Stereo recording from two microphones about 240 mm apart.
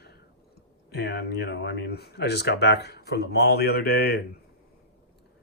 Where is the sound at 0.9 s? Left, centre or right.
Left.